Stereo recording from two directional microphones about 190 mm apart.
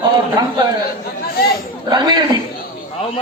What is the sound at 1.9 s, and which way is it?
Speech, 20° right (ahead or behind).